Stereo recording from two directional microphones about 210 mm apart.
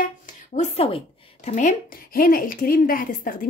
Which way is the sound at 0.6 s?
30° left (ahead or behind).